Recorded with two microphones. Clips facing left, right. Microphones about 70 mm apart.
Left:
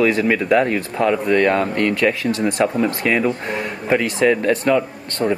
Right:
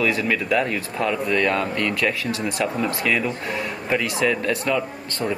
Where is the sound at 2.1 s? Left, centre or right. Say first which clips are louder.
Left 6 dB; left.